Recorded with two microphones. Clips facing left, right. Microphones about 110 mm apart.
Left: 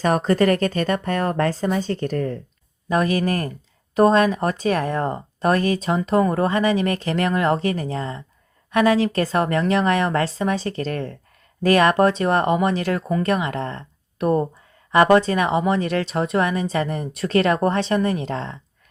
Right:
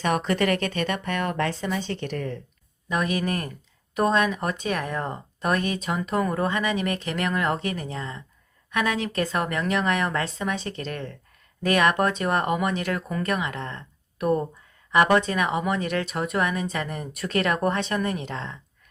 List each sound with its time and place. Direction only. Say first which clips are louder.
0.0 s speech: left 5 dB; 40° left (ahead or behind)